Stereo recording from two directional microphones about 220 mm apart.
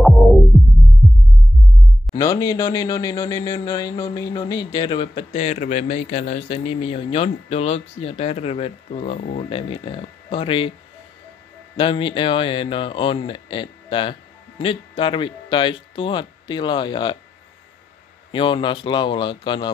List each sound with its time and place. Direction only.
2.1 s speech: 15° left (ahead or behind)
11.7 s speech: 20° left (ahead or behind)
18.3 s speech: 25° left (ahead or behind)